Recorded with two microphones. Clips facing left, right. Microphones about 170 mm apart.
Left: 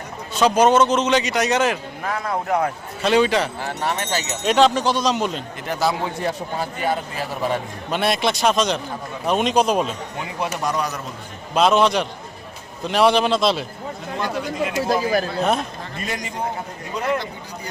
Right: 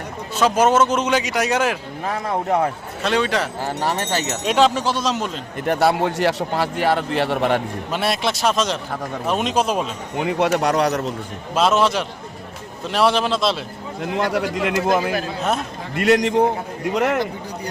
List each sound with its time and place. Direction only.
0.3 s a man's voice: 5° right (ahead or behind)
2.0 s speech: 25° right (ahead or behind)
3.0 s a man's voice: centre (ahead or behind)
3.6 s speech: 35° right (ahead or behind)
4.4 s a man's voice: 5° right (ahead or behind)
5.6 s a man's voice: 60° right (ahead or behind)
7.9 s a man's voice: 5° right (ahead or behind)
10.2 s a man's voice: 70° right (ahead or behind)
11.5 s a man's voice: 5° right (ahead or behind)
14.2 s a man's voice: 80° right